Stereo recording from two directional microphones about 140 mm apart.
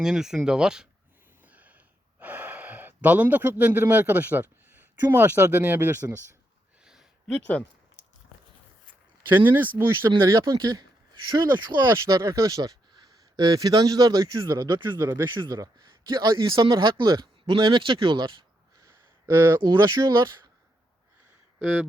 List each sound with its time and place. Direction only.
0.0 s speech: 5° right (ahead or behind)
1.5 s gasp: 10° right (ahead or behind)
5.1 s speech: 15° right (ahead or behind)
9.3 s speech: 15° right (ahead or behind); by 18.3 s 35° right (ahead or behind)
18.8 s speech: 20° right (ahead or behind)